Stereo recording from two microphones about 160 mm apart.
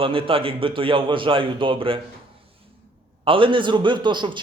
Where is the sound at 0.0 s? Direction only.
35° right (ahead or behind).